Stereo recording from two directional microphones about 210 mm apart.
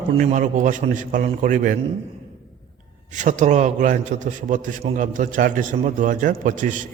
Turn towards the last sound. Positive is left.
turn(degrees=-40)  # may be behind; listen again after turning